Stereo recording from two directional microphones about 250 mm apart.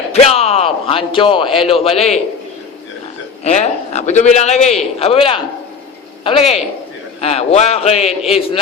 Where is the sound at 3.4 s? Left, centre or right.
Left.